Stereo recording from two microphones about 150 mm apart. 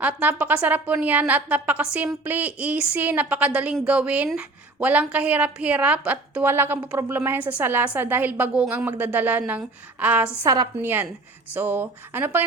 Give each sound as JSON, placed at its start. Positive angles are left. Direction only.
{"t": 0.0, "sound": "a woman's voice", "side_deg": -10}
{"t": 10.4, "sound": "a woman's voice", "side_deg": -25}
{"t": 10.8, "sound": "a woman's voice", "side_deg": -10}